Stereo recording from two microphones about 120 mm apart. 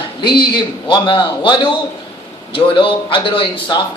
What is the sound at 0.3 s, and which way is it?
A man's voice, 40° left (ahead or behind).